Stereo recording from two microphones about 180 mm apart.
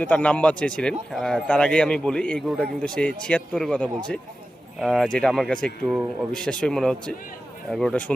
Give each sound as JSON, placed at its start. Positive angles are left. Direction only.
{"t": 0.0, "sound": "speech", "side_deg": 10}